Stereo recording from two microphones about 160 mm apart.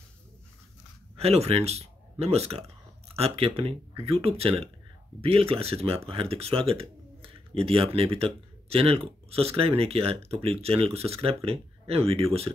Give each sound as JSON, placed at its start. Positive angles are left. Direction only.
{"t": 1.1, "sound": "speech", "side_deg": -40}